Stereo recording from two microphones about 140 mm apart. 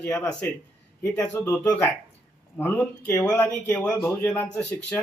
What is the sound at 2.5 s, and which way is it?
Speech, 15° left (ahead or behind).